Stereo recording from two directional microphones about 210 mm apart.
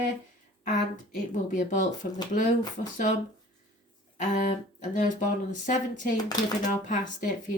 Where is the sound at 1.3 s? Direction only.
35° left (ahead or behind).